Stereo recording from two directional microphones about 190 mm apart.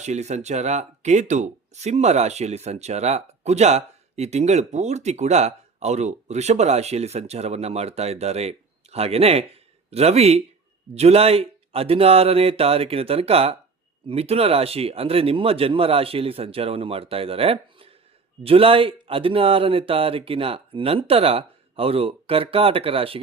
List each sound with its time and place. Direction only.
0.0 s speech: 35° right (ahead or behind)